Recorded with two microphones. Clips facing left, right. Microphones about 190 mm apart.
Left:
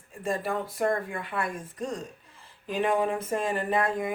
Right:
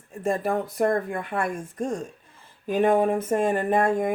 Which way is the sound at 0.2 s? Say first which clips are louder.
Right 5 dB; 45° right (ahead or behind).